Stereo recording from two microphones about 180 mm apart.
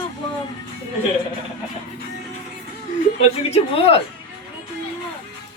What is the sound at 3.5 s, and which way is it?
Speech, 30° left (ahead or behind).